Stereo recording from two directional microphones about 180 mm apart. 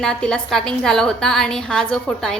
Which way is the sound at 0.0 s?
5° left (ahead or behind).